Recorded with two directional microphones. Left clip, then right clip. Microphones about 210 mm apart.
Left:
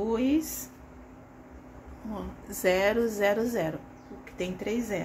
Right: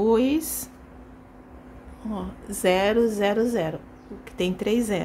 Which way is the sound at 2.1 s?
20° right (ahead or behind).